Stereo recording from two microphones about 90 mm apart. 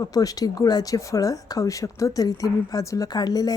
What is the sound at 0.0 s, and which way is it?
A woman's voice, 40° left (ahead or behind).